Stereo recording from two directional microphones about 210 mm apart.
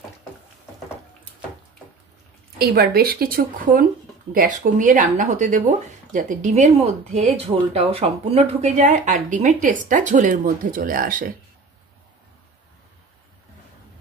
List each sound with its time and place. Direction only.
2.6 s speech: 45° right (ahead or behind)